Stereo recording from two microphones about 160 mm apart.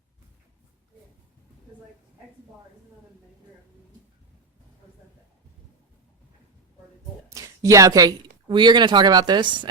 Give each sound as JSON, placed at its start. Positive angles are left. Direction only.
{"t": 7.3, "sound": "speech", "side_deg": -20}